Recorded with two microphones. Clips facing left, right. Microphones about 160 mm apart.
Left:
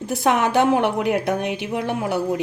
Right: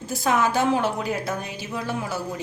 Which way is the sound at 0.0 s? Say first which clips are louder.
Left 3 dB; 70° left (ahead or behind).